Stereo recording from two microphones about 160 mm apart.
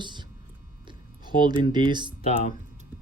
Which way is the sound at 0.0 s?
30° right (ahead or behind).